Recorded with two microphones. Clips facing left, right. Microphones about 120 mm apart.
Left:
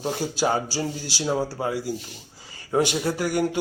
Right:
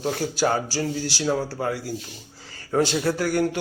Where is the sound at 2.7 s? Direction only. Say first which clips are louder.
Right 1 dB; 15° left (ahead or behind).